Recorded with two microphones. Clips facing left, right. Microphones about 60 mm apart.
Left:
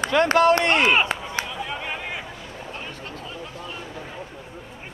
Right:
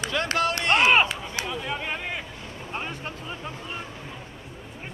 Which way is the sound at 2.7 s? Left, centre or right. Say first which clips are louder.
Right 5 dB; right.